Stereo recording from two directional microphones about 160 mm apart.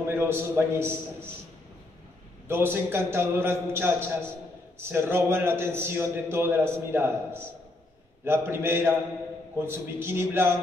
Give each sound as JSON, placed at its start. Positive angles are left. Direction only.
{"t": 0.0, "sound": "a man's voice", "side_deg": -15}
{"t": 2.4, "sound": "a man's voice", "side_deg": -15}